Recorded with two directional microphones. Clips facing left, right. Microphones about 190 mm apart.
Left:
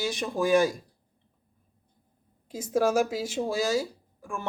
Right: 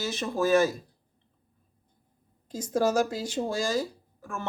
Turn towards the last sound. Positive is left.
turn(degrees=10)  # may be behind; listen again after turning